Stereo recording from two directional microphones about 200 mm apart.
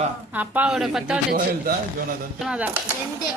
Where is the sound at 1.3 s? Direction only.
45° right (ahead or behind).